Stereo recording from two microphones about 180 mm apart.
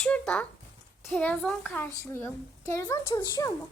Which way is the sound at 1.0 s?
5° left (ahead or behind).